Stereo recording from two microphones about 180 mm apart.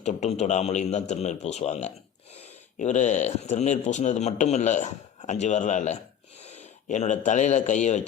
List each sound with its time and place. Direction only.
0.0 s a man's voice: 40° left (ahead or behind)
6.6 s a sound: 40° left (ahead or behind)
7.3 s a man's voice: 40° left (ahead or behind)